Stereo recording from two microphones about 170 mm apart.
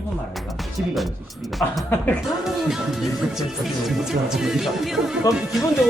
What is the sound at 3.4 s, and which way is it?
Speech, centre (ahead or behind).